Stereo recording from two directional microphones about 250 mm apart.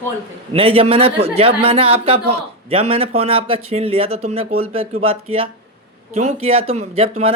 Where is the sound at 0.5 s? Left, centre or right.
Right.